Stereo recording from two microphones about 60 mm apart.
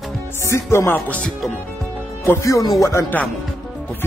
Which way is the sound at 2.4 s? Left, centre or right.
Left.